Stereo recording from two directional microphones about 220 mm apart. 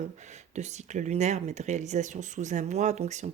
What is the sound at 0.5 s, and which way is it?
Speech, 30° right (ahead or behind).